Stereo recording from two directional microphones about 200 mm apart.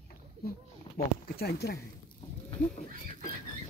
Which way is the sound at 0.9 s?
50° left (ahead or behind).